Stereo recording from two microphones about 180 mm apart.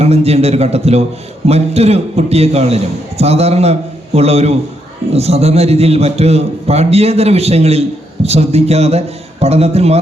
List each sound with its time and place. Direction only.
0.0 s a man's voice: 35° right (ahead or behind)